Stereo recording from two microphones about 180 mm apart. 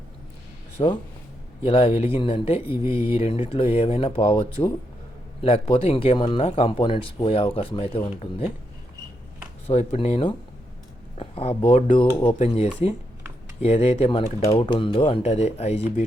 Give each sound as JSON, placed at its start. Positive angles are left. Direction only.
{"t": 0.8, "sound": "speech", "side_deg": 30}
{"t": 9.6, "sound": "speech", "side_deg": 35}